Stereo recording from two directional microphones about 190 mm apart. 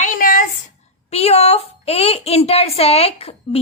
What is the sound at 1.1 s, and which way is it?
A woman's voice, 35° left (ahead or behind).